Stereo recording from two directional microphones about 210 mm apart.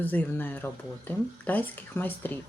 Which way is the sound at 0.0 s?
10° left (ahead or behind).